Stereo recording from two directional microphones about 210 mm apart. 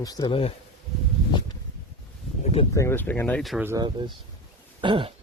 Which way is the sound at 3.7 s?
20° right (ahead or behind).